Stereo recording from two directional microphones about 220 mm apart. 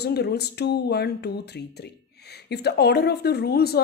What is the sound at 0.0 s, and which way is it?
Speech, 45° left (ahead or behind).